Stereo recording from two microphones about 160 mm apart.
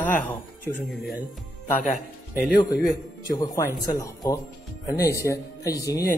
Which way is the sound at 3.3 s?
25° left (ahead or behind).